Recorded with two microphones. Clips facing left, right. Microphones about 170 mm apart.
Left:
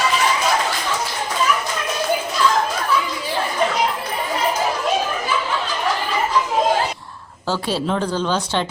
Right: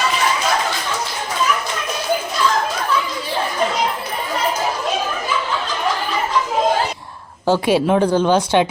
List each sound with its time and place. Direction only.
7.5 s a woman's voice: 15° right (ahead or behind)